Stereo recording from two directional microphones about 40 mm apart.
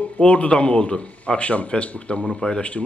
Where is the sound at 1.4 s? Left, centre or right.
Left.